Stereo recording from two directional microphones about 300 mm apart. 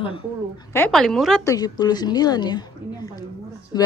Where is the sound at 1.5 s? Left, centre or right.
Centre.